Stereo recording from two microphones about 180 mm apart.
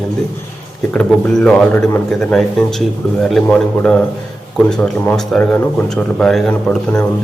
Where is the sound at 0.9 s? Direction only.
5° left (ahead or behind).